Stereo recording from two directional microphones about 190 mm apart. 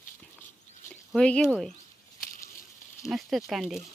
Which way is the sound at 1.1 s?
5° left (ahead or behind).